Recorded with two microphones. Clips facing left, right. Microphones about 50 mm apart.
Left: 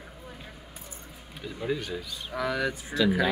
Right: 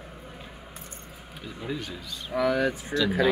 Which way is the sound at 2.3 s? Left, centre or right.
Right.